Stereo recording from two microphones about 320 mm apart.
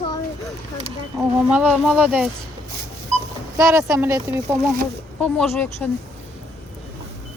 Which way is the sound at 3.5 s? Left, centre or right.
Centre.